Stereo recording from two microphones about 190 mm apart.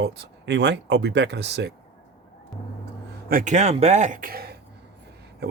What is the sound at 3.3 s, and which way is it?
Speech, 45° right (ahead or behind).